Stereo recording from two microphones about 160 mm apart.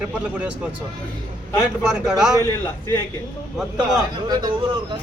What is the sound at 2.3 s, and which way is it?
Speech, 15° left (ahead or behind).